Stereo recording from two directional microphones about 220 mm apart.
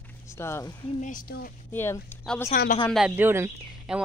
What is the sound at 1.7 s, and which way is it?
Speech, 10° left (ahead or behind).